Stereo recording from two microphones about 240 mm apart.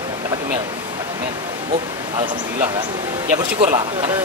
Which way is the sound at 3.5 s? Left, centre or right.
Centre.